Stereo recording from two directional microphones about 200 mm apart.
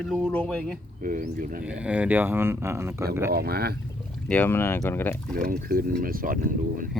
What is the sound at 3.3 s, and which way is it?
Speech, 50° right (ahead or behind).